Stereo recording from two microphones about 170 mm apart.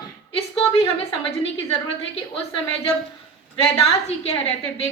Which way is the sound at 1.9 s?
35° left (ahead or behind).